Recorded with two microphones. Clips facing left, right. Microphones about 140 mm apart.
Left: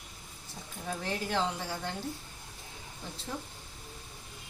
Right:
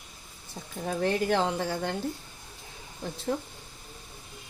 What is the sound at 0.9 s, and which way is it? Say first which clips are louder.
A woman's voice: right 9 dB; 60° right (ahead or behind).